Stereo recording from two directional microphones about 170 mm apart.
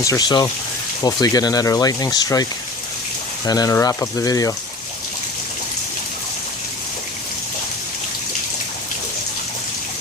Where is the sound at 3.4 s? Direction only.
20° left (ahead or behind).